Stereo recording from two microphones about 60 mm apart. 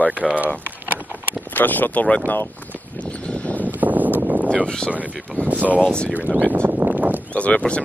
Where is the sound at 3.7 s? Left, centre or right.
Right.